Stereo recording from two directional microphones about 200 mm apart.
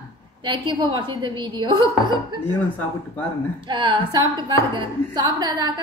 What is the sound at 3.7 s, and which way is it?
A woman's voice, 25° right (ahead or behind).